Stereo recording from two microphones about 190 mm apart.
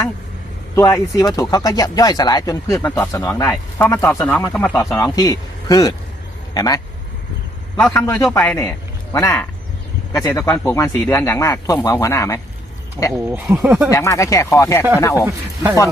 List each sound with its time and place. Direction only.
0.8 s speech: 15° left (ahead or behind)
13.1 s speech: 15° right (ahead or behind)
13.9 s speech: 15° left (ahead or behind)